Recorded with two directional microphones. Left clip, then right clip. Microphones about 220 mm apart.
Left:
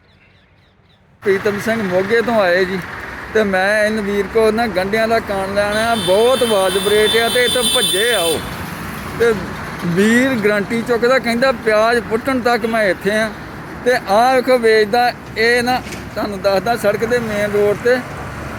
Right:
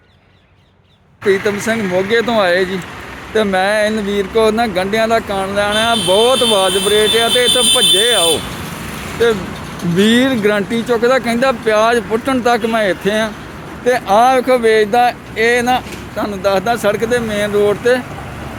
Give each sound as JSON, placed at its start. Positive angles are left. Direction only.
{"t": 1.3, "sound": "speech", "side_deg": -5}
{"t": 10.0, "sound": "speech", "side_deg": -10}